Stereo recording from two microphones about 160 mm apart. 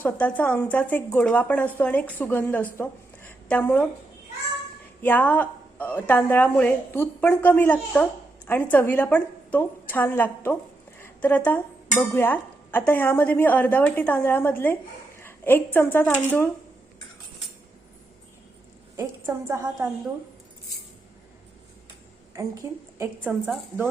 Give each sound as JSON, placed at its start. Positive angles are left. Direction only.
{"t": 0.0, "sound": "a woman's voice", "side_deg": 10}
{"t": 5.0, "sound": "a woman's voice", "side_deg": 10}
{"t": 18.9, "sound": "a woman's voice", "side_deg": -20}
{"t": 22.3, "sound": "a woman's voice", "side_deg": -20}
{"t": 23.0, "sound": "a woman's voice", "side_deg": -5}